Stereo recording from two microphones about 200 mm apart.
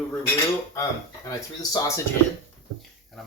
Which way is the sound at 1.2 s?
20° left (ahead or behind).